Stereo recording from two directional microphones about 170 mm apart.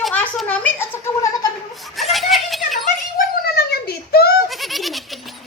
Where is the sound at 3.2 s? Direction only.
70° left (ahead or behind).